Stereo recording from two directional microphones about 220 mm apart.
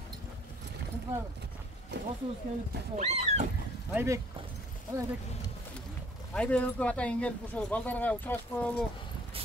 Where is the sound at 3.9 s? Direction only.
10° right (ahead or behind).